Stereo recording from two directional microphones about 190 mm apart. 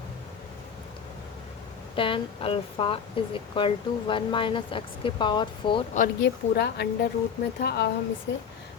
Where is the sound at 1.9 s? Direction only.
25° left (ahead or behind).